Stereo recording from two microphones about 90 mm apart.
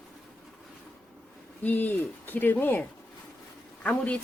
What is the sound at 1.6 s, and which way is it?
Speech, 20° left (ahead or behind).